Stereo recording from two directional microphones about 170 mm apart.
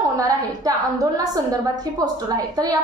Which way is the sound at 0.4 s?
20° right (ahead or behind).